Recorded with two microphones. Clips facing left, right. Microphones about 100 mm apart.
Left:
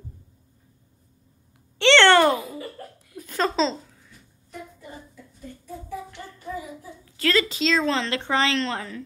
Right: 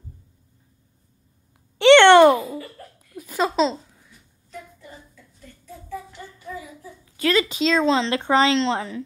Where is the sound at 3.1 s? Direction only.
10° right (ahead or behind).